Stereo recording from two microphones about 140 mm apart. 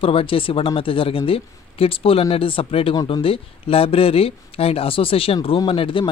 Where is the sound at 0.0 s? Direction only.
40° left (ahead or behind).